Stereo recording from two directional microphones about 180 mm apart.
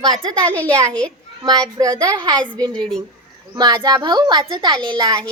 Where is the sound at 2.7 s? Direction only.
5° left (ahead or behind).